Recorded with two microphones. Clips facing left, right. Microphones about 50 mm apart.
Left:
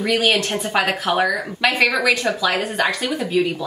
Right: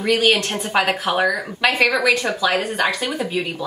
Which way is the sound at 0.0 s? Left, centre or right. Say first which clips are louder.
Right 1 dB; centre.